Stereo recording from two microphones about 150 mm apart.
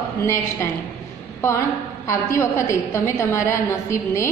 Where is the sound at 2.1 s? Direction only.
20° left (ahead or behind).